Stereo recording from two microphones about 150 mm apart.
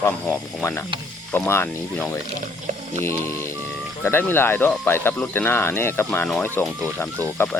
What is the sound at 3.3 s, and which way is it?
Speech, 15° left (ahead or behind).